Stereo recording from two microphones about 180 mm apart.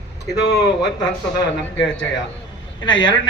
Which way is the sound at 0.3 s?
75° left (ahead or behind).